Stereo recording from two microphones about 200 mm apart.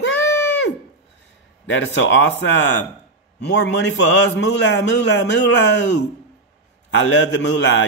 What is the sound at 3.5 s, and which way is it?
A man's voice, 60° left (ahead or behind).